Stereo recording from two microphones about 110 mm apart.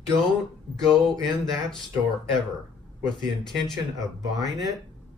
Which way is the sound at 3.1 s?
5° left (ahead or behind).